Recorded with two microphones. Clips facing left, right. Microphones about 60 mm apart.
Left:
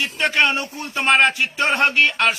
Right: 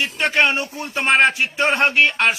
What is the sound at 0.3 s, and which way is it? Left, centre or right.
Speech, right.